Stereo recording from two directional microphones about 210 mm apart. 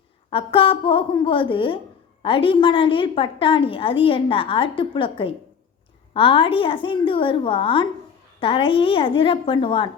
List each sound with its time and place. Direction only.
0.3 s a woman's voice: 25° left (ahead or behind)